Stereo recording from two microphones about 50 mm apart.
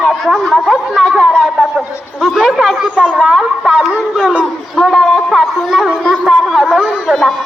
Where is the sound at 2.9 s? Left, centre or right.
Right.